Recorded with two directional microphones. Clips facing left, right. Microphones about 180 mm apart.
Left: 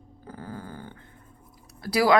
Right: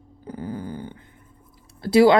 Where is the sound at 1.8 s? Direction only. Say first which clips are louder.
Right 6 dB; 25° right (ahead or behind).